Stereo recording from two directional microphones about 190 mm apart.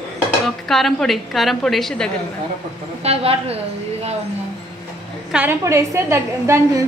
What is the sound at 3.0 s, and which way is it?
Speech, 30° right (ahead or behind).